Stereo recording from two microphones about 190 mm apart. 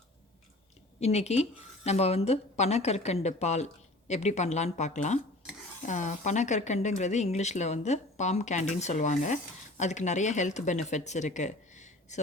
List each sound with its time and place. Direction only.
0.9 s speech: 35° left (ahead or behind)